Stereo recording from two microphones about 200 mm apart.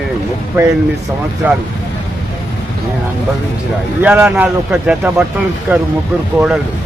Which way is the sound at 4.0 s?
10° right (ahead or behind).